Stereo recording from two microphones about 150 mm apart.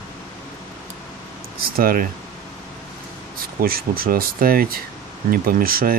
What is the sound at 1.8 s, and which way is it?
Speech, 75° right (ahead or behind).